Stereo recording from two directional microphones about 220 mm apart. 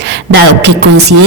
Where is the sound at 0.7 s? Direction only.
50° right (ahead or behind).